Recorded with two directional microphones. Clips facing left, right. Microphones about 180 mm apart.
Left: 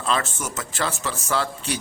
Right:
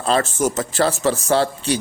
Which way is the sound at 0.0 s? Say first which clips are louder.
Right 7 dB; 35° right (ahead or behind).